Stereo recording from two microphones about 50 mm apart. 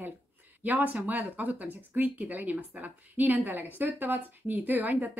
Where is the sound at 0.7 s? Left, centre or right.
Right.